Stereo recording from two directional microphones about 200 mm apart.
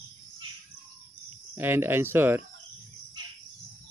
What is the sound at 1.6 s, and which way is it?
Speech, 10° right (ahead or behind).